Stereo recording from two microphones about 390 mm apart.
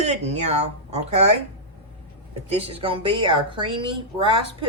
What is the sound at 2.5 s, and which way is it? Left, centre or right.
Speech, centre.